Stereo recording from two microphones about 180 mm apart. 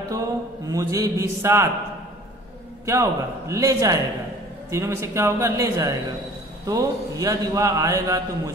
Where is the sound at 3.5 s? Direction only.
20° right (ahead or behind).